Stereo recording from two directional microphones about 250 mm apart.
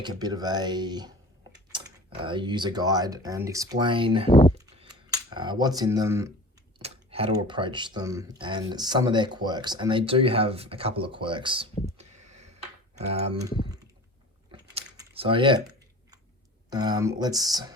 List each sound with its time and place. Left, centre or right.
0.0 s speech: centre
4.3 s speech: centre
4.6 s camera: centre
6.7 s speech: right
13.4 s speech: centre
14.5 s a sound: centre
16.6 s speech: centre